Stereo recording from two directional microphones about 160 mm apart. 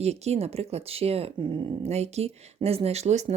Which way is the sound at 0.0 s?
40° right (ahead or behind).